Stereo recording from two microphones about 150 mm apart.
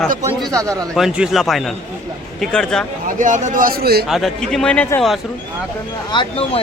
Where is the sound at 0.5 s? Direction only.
20° right (ahead or behind).